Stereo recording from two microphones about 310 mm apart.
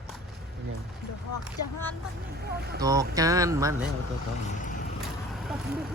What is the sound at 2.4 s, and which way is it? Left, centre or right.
Speech, right.